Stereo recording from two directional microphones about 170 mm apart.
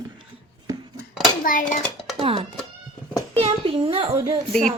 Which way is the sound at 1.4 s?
50° left (ahead or behind).